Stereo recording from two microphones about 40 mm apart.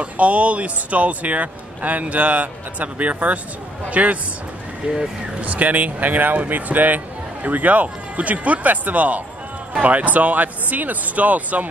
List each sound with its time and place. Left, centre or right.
0.0 s speech: right
4.8 s speech: right
5.4 s speech: right